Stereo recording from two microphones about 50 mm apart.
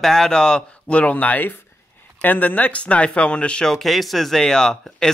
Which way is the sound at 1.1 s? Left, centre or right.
Left.